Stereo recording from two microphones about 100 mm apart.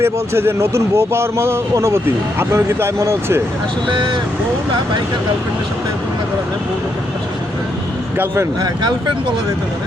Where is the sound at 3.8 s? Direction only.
55° right (ahead or behind).